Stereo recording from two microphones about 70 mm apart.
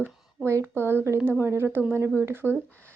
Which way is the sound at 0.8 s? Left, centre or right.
Right.